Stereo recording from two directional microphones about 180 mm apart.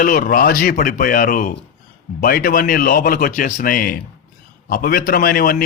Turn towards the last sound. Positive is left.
turn(degrees=55)  # may be behind; listen again after turning